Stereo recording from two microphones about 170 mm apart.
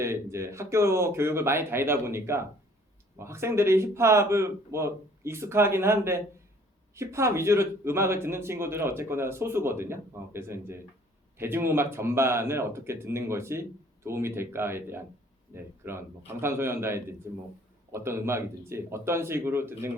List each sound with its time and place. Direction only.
0.0 s a man's voice: 15° right (ahead or behind)